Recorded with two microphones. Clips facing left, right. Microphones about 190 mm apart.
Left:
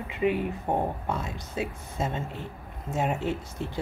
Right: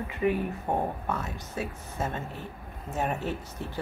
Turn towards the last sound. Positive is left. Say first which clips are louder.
# left 3 dB
turn(degrees=20)  # may be behind; listen again after turning